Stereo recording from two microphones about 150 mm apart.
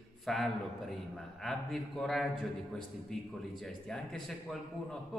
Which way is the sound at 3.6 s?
Centre (ahead or behind).